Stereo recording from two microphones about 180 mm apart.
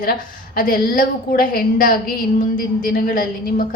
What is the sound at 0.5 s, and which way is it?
A woman's voice, 50° left (ahead or behind).